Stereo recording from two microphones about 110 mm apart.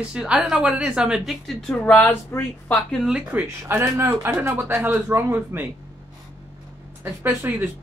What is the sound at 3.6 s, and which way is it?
Speech, 30° right (ahead or behind).